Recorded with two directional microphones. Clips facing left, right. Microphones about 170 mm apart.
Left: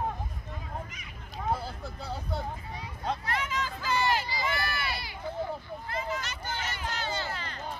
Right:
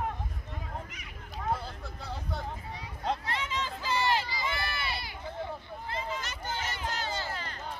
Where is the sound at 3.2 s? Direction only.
25° right (ahead or behind).